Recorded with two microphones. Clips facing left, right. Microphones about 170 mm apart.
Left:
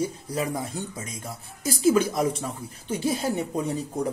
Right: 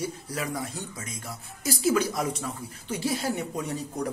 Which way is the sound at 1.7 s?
25° left (ahead or behind).